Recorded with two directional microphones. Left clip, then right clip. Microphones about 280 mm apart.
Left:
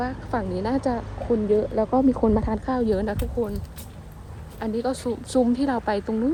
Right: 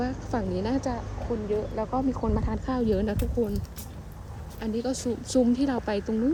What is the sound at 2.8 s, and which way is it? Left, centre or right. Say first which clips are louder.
Speech: left 1 dB; centre.